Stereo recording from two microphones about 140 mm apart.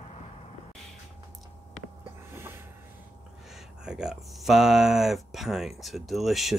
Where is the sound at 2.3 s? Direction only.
15° right (ahead or behind).